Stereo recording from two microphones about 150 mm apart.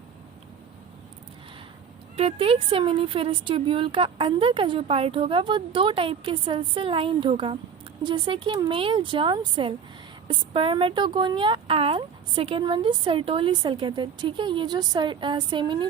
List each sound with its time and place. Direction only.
2.1 s speech: 40° right (ahead or behind)